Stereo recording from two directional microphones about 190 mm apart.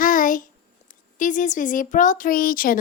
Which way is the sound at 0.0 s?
45° left (ahead or behind).